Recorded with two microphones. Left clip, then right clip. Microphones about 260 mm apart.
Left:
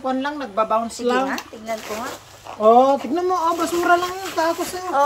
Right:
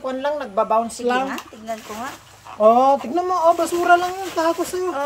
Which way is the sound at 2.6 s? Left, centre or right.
Right.